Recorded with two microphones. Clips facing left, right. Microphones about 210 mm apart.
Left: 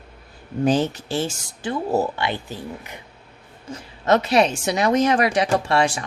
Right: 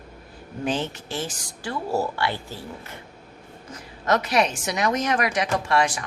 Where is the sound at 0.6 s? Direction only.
40° left (ahead or behind); by 3.0 s 15° left (ahead or behind).